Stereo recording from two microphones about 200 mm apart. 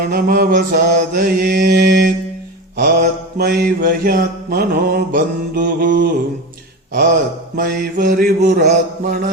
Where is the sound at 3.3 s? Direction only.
50° right (ahead or behind).